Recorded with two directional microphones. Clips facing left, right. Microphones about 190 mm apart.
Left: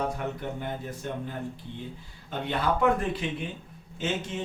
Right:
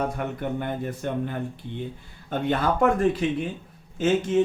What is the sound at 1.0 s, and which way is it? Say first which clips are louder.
Speech: right 6 dB; 65° right (ahead or behind).